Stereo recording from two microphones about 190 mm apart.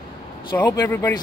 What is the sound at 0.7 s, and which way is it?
Speech, 15° left (ahead or behind).